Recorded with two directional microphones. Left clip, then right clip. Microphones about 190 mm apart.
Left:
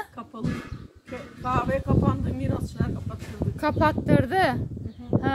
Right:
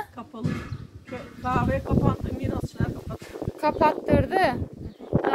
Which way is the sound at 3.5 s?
15° left (ahead or behind).